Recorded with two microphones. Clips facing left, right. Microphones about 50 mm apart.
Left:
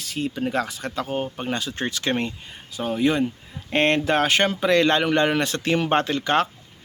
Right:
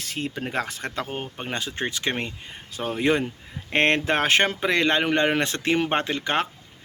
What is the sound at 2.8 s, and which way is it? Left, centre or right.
Speech, right.